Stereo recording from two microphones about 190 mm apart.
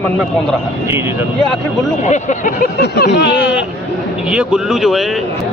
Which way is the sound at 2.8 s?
60° left (ahead or behind).